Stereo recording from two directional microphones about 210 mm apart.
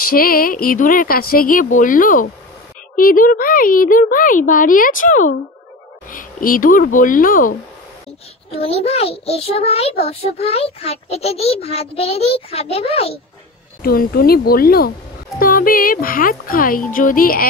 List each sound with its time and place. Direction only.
0.1 s a child's voice: 45° left (ahead or behind)
8.5 s a child's voice: 30° left (ahead or behind)
13.8 s a child's voice: 45° left (ahead or behind)